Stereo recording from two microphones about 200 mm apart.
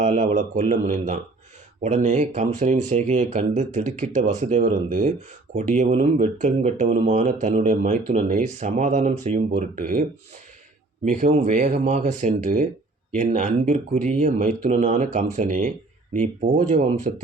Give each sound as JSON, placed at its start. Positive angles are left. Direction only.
{"t": 0.0, "sound": "speech", "side_deg": -35}
{"t": 11.0, "sound": "speech", "side_deg": -40}